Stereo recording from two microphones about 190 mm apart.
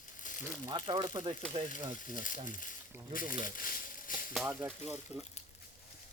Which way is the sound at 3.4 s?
50° left (ahead or behind).